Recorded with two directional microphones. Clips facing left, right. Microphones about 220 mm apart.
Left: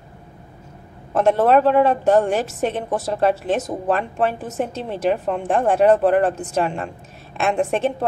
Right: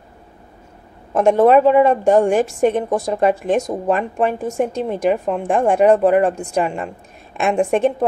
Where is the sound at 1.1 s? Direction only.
10° right (ahead or behind).